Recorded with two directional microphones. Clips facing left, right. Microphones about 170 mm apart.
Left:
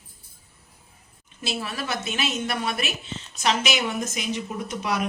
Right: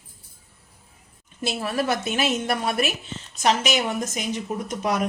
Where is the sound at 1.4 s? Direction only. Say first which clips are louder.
Right 5 dB; 50° right (ahead or behind).